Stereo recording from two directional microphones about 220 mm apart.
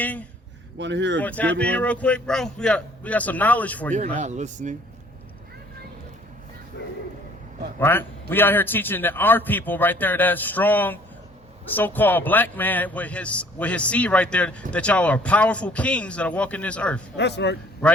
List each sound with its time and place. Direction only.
0.0 s speech: 5° left (ahead or behind)
0.8 s speech: 55° right (ahead or behind)
1.2 s a man's voice: 5° left (ahead or behind)
4.2 s speech: 30° right (ahead or behind)
6.8 s a sound: 55° left (ahead or behind)
7.8 s a man's voice: 10° left (ahead or behind)
17.2 s speech: 50° left (ahead or behind)